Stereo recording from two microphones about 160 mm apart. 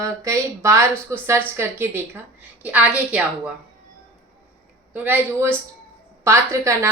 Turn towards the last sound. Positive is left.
turn(degrees=-15)  # may be behind; listen again after turning